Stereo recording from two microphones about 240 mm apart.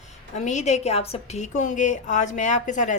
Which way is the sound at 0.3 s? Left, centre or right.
Left.